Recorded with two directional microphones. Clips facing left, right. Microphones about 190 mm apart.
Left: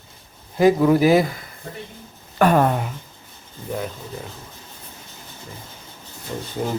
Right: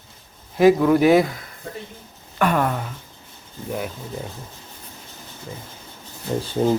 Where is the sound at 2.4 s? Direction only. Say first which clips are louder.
Left 4 dB; 35° left (ahead or behind).